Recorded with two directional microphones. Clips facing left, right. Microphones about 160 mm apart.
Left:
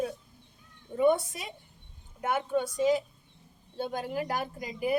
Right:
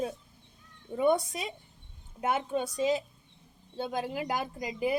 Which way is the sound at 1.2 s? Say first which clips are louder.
Right 4 dB; 20° right (ahead or behind).